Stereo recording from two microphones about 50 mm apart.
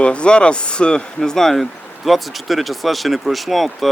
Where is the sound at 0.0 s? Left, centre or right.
Left.